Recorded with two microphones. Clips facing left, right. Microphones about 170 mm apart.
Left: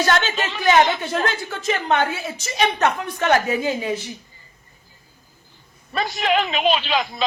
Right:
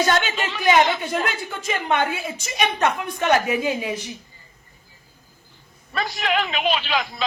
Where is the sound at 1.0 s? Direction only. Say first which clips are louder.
Left 2 dB; 10° right (ahead or behind).